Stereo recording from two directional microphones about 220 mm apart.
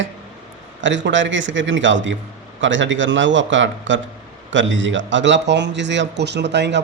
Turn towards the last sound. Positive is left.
turn(degrees=-50)  # may be behind; listen again after turning